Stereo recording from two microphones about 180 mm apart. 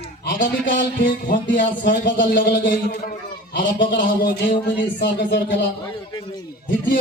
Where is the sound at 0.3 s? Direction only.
45° left (ahead or behind).